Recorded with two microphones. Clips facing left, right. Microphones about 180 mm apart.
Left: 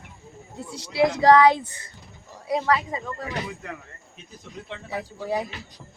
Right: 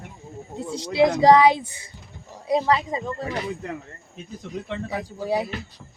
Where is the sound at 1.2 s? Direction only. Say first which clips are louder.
Even; 15° right (ahead or behind).